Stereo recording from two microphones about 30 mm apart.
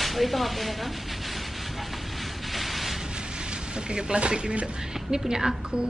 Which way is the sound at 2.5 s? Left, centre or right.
Centre.